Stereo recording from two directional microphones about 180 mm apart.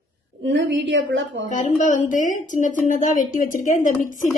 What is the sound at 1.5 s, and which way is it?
A woman's voice, 45° left (ahead or behind).